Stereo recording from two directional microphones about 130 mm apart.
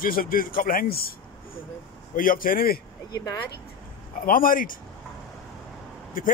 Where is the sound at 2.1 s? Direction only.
90° left.